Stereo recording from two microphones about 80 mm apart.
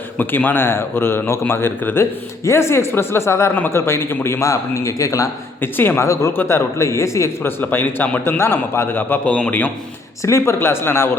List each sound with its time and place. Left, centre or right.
0.2 s a man's voice: left
5.7 s a man's voice: left
6.0 s a man's voice: left
7.6 s a man's voice: left
10.2 s a man's voice: left